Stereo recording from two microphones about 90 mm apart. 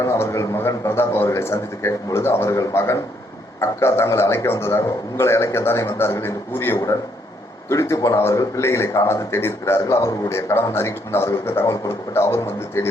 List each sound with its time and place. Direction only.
0.0 s a man's voice: 35° left (ahead or behind)